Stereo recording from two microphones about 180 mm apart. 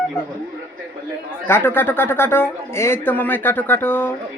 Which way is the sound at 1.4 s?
10° left (ahead or behind).